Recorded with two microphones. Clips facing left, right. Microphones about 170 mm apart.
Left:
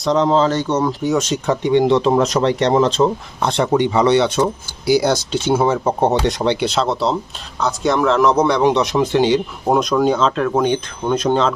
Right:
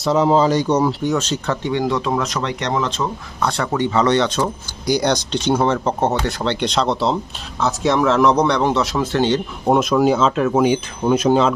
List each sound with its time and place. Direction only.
0.0 s speech: 5° right (ahead or behind)
0.9 s speech: 10° left (ahead or behind); by 3.1 s 35° left (ahead or behind)
3.4 s speech: 20° left (ahead or behind)
9.6 s speech: centre (ahead or behind)